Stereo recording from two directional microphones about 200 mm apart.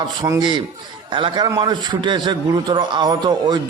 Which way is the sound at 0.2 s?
20° right (ahead or behind).